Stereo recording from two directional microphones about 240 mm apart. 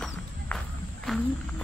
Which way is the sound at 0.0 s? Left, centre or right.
Centre.